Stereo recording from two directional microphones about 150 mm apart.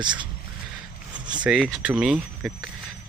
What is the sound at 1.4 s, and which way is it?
Speech, 5° right (ahead or behind).